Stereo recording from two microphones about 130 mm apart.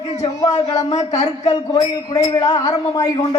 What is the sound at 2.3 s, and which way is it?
A man's voice, 30° left (ahead or behind).